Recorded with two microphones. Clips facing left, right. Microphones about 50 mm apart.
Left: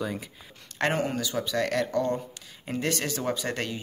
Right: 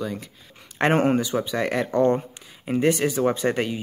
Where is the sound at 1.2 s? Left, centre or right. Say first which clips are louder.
Right 3 dB; right.